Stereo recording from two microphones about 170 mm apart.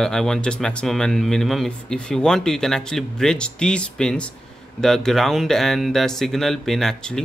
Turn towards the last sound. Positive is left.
turn(degrees=5)  # may be behind; listen again after turning